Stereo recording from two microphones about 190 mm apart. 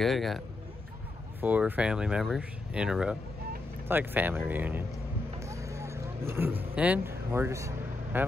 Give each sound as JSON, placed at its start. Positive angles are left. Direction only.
{"t": 0.0, "sound": "speech", "side_deg": 0}
{"t": 1.4, "sound": "speech", "side_deg": -10}
{"t": 5.4, "sound": "vehicle", "side_deg": -15}